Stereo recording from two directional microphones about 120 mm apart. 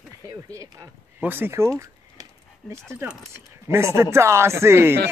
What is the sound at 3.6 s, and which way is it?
Speech, 20° right (ahead or behind).